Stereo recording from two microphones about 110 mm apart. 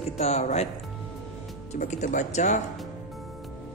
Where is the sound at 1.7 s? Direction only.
90° left.